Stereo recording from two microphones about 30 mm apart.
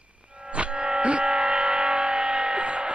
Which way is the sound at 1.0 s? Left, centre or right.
Right.